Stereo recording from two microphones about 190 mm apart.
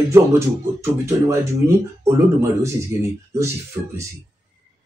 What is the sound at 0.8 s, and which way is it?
A man's voice, 15° right (ahead or behind).